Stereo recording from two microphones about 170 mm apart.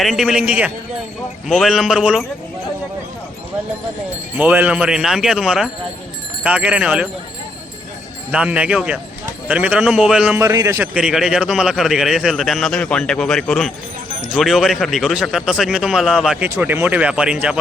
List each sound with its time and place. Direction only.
0.0 s a man's voice: centre (ahead or behind)
4.4 s a man's voice: 10° right (ahead or behind)
8.3 s a man's voice: 5° right (ahead or behind)
10.4 s a man's voice: 20° right (ahead or behind)
10.9 s a man's voice: 5° right (ahead or behind)